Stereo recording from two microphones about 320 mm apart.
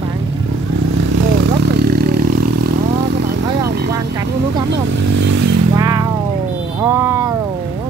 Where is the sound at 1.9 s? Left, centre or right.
Right.